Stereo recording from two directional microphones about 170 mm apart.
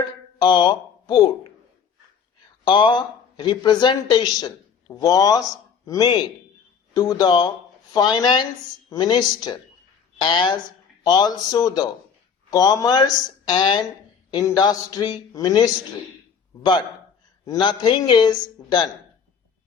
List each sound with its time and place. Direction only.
0.3 s speech: 25° left (ahead or behind)
2.6 s a man's voice: 30° left (ahead or behind)
17.4 s a man's voice: 25° left (ahead or behind)